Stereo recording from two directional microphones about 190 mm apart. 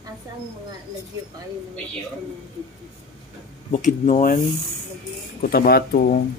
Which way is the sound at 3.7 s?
40° left (ahead or behind).